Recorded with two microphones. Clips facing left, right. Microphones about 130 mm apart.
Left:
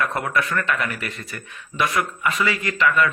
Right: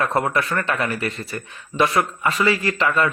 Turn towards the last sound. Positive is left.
turn(degrees=-30)  # may be behind; listen again after turning